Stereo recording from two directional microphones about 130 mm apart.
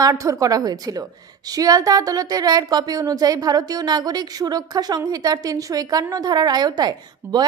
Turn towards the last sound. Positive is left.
turn(degrees=-30)  # may be behind; listen again after turning